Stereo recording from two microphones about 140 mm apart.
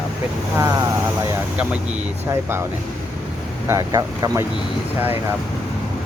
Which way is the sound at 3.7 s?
25° right (ahead or behind).